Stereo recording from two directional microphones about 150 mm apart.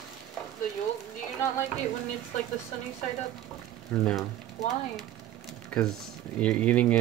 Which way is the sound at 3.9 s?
15° left (ahead or behind).